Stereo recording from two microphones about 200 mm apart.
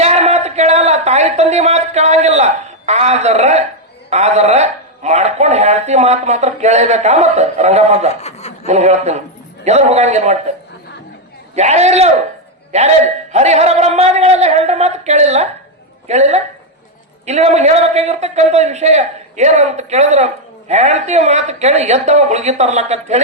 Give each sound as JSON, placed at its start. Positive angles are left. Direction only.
{"t": 0.0, "sound": "a sound", "side_deg": -35}
{"t": 4.1, "sound": "a man's voice", "side_deg": -35}
{"t": 8.2, "sound": "chuckle", "side_deg": 30}
{"t": 8.6, "sound": "a man's voice", "side_deg": -35}
{"t": 11.5, "sound": "a man's voice", "side_deg": -35}